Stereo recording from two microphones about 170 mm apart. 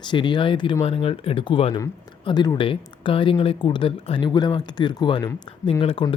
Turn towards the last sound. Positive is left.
turn(degrees=30)  # may be behind; listen again after turning